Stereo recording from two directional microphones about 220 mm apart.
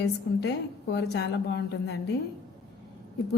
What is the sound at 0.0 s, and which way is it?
Speech, 50° left (ahead or behind).